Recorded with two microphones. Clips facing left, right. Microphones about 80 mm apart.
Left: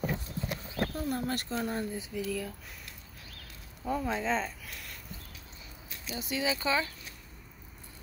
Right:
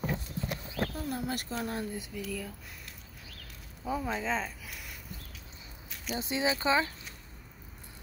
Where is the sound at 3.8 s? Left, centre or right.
Centre.